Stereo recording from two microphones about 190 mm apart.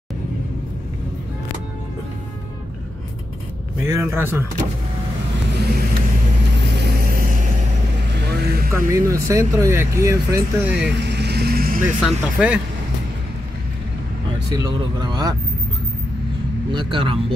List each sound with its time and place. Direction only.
3.8 s speech: 15° right (ahead or behind)
5.7 s vehicle: 55° right (ahead or behind)
8.1 s vehicle: 60° right (ahead or behind)
8.7 s speech: 15° right (ahead or behind)
11.0 s vehicle: 65° right (ahead or behind)
12.0 s speech: 5° right (ahead or behind)
14.5 s speech: 20° right (ahead or behind)
16.7 s speech: 25° right (ahead or behind)